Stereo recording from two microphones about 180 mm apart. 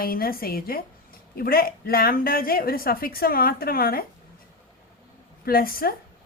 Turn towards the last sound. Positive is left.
turn(degrees=55)  # may be behind; listen again after turning